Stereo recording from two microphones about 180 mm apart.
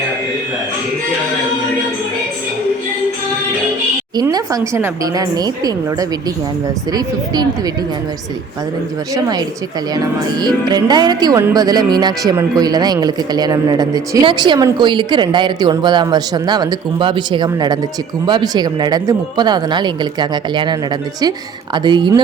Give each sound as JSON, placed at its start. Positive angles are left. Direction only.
{"t": 4.2, "sound": "speech", "side_deg": -20}
{"t": 9.1, "sound": "speech", "side_deg": -20}
{"t": 10.4, "sound": "speech", "side_deg": -25}
{"t": 21.8, "sound": "speech", "side_deg": -25}